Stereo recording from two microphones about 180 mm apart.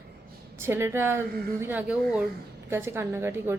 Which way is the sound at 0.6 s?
15° right (ahead or behind).